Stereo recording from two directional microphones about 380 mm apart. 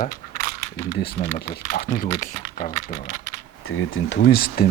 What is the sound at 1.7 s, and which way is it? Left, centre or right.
Speech, left.